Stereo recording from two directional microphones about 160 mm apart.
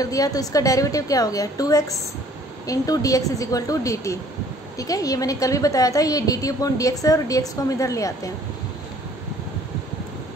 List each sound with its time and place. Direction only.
0.0 s a woman's voice: 20° left (ahead or behind)